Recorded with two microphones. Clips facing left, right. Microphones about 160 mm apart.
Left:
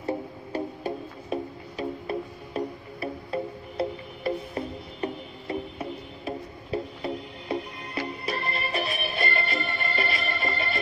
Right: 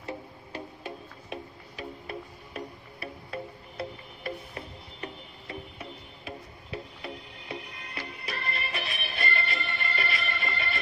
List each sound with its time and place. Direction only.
0.0 s music: 35° left (ahead or behind)